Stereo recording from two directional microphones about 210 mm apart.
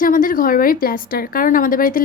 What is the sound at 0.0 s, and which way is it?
Speech, 40° left (ahead or behind).